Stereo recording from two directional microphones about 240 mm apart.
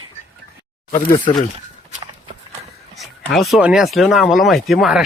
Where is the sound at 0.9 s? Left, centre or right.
Centre.